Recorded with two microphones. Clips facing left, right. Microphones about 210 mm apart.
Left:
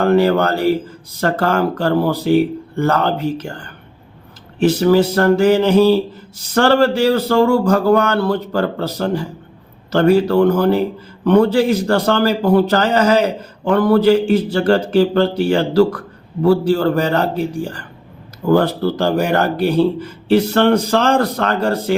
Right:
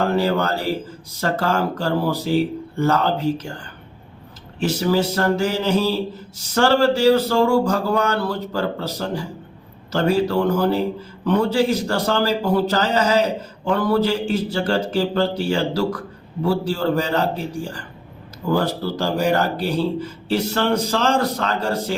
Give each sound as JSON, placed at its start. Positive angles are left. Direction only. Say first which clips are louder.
{"t": 0.0, "sound": "a man's voice", "louder": "left 6 dB", "side_deg": 60}
{"t": 4.6, "sound": "a man's voice", "louder": "left 7 dB", "side_deg": 60}
{"t": 18.4, "sound": "a man's voice", "louder": "left 6 dB", "side_deg": 60}